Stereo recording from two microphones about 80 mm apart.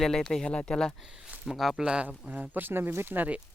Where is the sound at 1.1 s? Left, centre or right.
Centre.